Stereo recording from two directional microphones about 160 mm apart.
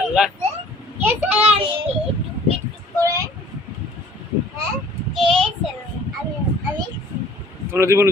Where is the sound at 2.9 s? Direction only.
20° right (ahead or behind).